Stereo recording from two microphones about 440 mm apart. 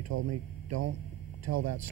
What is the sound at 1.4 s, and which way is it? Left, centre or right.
Speech, right.